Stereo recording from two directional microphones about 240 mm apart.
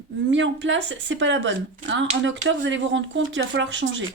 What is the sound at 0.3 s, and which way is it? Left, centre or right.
Speech, right.